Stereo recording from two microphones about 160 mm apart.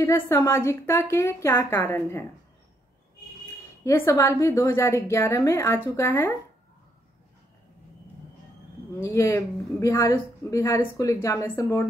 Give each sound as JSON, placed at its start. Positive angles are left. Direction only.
{"t": 0.0, "sound": "speech", "side_deg": 15}
{"t": 3.8, "sound": "speech", "side_deg": 15}
{"t": 9.0, "sound": "speech", "side_deg": 20}